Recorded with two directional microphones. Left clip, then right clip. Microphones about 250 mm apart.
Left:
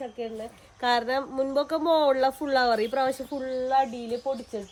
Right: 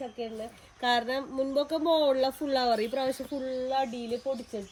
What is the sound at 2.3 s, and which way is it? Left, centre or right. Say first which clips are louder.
Speech: left 4 dB; left.